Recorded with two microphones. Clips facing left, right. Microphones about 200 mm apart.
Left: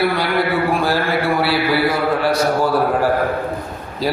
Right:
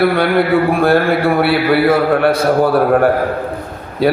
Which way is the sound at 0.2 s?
55° right (ahead or behind).